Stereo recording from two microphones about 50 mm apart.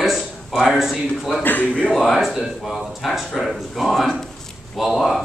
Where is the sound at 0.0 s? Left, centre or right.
Centre.